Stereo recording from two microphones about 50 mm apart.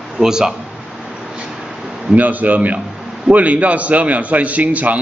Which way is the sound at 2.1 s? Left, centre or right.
Right.